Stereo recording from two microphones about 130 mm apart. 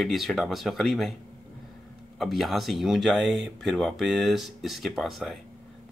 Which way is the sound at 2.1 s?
Centre (ahead or behind).